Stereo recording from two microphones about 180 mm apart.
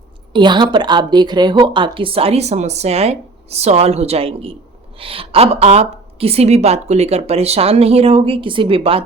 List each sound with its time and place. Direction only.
0.3 s a woman's voice: 25° right (ahead or behind)